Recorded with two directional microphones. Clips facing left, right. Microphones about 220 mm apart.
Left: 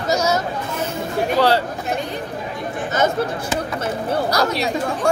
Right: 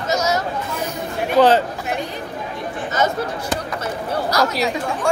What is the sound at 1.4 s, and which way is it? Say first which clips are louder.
Speech: right 4 dB; 20° right (ahead or behind).